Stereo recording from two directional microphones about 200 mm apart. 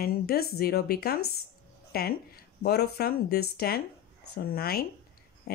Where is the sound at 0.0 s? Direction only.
50° left (ahead or behind).